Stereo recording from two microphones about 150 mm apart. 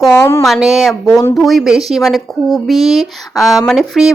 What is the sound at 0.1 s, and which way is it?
Speech, 15° left (ahead or behind).